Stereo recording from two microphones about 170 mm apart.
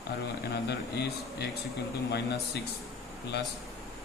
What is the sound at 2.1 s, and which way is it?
Speech, 80° left.